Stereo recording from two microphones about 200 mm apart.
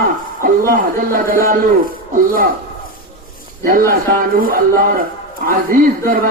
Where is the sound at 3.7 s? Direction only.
45° right (ahead or behind).